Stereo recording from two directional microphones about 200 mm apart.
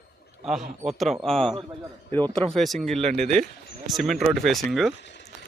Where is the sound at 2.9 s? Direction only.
35° right (ahead or behind).